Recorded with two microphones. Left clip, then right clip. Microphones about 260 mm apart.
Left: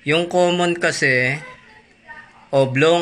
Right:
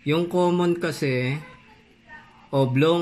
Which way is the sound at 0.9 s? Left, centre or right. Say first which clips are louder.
Left 9 dB; centre.